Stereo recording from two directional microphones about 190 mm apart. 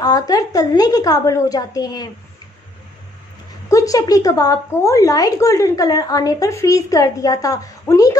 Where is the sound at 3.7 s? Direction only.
15° left (ahead or behind).